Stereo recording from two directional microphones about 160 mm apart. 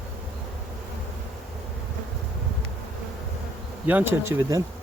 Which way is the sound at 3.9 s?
10° right (ahead or behind).